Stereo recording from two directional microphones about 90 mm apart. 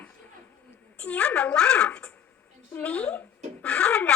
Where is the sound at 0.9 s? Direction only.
15° left (ahead or behind).